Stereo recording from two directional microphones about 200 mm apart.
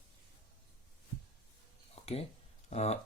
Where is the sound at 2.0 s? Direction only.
30° left (ahead or behind).